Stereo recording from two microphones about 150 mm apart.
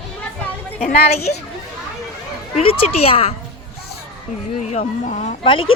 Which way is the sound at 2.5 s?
40° left (ahead or behind).